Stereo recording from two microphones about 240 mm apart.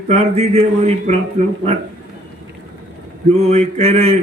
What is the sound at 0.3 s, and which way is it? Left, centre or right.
A man's voice, right.